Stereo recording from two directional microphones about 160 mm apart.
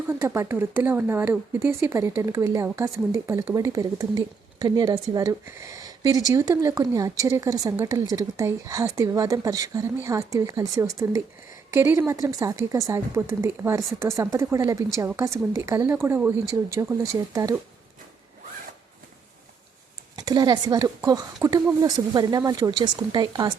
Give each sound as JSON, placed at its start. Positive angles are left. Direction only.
{"t": 0.1, "sound": "a woman's voice", "side_deg": -15}
{"t": 20.1, "sound": "a woman's voice", "side_deg": -25}